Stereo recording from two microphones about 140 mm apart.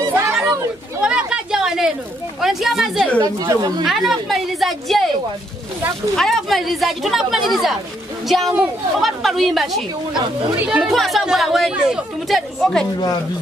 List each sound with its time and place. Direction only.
0.1 s children playing: 20° right (ahead or behind)
1.0 s a sound: 5° right (ahead or behind)
2.4 s speech: centre (ahead or behind)
3.2 s speech: 30° right (ahead or behind)
3.8 s speech: centre (ahead or behind)
6.1 s speech: centre (ahead or behind)